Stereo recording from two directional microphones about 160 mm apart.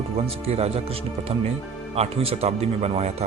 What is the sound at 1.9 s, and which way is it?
Speech, 40° right (ahead or behind).